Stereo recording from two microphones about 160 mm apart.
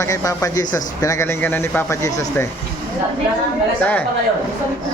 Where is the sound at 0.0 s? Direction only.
20° left (ahead or behind).